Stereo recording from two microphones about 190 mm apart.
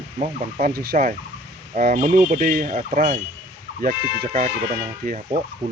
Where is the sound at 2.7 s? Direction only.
35° right (ahead or behind).